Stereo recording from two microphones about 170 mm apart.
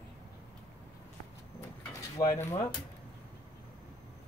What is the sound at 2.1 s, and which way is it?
Speech, 15° left (ahead or behind).